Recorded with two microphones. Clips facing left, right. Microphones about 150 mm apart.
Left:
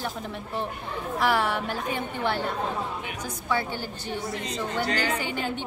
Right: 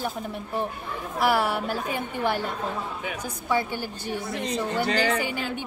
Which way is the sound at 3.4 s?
15° right (ahead or behind).